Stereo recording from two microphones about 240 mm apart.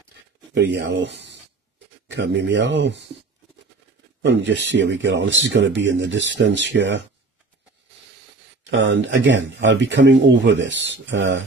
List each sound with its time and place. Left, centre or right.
0.7 s speech: right
4.2 s speech: right
8.6 s speech: right